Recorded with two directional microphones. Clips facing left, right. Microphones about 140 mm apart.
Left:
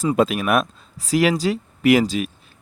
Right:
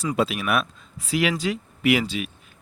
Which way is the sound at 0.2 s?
45° left (ahead or behind).